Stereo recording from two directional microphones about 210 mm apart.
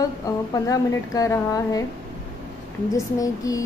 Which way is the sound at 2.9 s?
15° left (ahead or behind).